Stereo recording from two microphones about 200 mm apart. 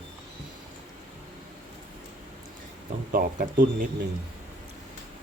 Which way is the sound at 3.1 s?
45° right (ahead or behind).